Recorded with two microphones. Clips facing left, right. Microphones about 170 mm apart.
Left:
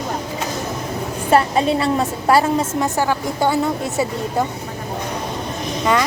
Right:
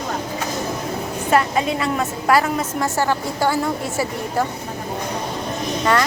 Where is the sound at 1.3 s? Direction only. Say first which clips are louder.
Left 3 dB; 30° left (ahead or behind).